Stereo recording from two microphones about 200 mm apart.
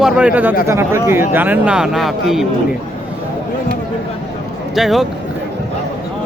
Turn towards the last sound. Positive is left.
turn(degrees=0)  # may be behind; listen again after turning